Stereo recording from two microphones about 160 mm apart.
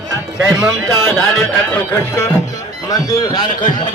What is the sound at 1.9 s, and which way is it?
A man's voice, 15° left (ahead or behind).